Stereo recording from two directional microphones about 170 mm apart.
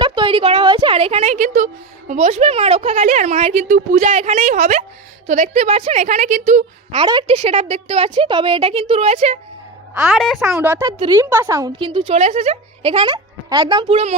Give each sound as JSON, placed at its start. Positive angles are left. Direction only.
{"t": 0.0, "sound": "a woman's voice", "side_deg": -30}
{"t": 6.9, "sound": "a woman's voice", "side_deg": -30}
{"t": 10.1, "sound": "speech", "side_deg": 0}
{"t": 10.6, "sound": "a woman's voice", "side_deg": -10}